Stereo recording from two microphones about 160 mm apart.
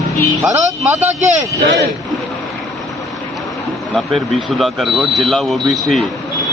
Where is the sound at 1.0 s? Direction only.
45° right (ahead or behind).